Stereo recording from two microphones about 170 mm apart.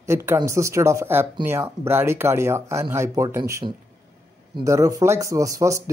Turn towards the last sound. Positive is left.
turn(degrees=-20)  # may be behind; listen again after turning